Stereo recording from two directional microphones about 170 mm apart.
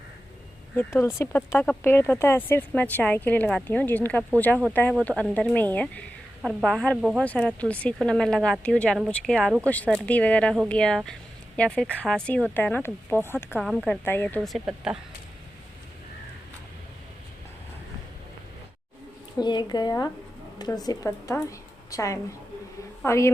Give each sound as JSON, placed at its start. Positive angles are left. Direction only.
{"t": 0.8, "sound": "speech", "side_deg": 15}
{"t": 7.3, "sound": "speech", "side_deg": 5}
{"t": 13.6, "sound": "speech", "side_deg": 5}
{"t": 19.4, "sound": "a woman's voice", "side_deg": 25}